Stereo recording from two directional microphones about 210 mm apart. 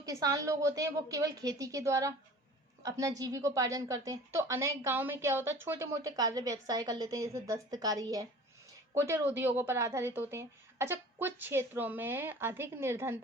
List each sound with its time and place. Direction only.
0.0 s a woman's voice: 15° right (ahead or behind)